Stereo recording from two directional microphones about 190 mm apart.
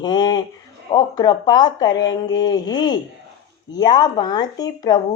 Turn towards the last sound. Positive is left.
turn(degrees=20)  # may be behind; listen again after turning